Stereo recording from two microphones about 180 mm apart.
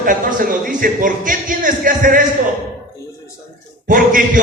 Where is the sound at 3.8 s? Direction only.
50° right (ahead or behind).